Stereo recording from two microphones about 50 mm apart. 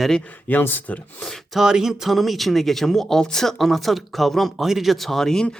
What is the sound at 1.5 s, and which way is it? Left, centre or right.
Speech, centre.